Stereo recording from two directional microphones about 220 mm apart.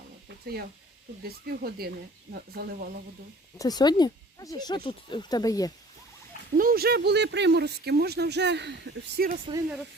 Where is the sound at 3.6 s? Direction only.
20° left (ahead or behind).